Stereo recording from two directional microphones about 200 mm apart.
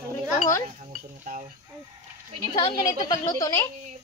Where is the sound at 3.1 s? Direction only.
15° left (ahead or behind).